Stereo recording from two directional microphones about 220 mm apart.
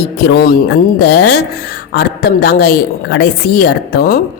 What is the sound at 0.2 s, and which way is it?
A woman's voice, 45° left (ahead or behind).